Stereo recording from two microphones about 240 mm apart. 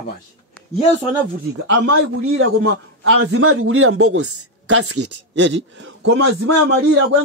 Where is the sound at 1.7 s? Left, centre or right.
Right.